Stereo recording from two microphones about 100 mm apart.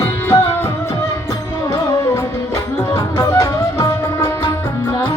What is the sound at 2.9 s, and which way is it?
Music, 30° left (ahead or behind).